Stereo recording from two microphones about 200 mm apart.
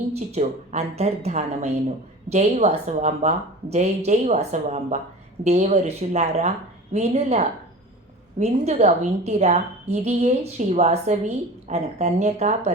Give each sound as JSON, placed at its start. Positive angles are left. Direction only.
{"t": 0.1, "sound": "a woman's voice", "side_deg": -30}